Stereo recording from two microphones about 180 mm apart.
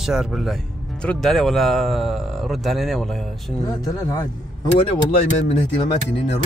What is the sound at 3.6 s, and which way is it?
Speech, 20° left (ahead or behind).